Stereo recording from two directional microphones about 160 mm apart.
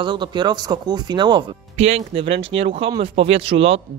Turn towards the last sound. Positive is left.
turn(degrees=-35)  # may be behind; listen again after turning